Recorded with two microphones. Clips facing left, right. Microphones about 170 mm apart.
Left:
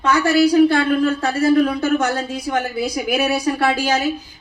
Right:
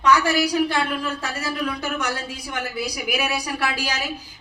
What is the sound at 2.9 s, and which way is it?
Speech, 50° left (ahead or behind).